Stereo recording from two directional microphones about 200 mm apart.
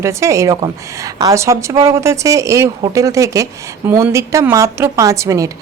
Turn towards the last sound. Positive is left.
turn(degrees=-15)  # may be behind; listen again after turning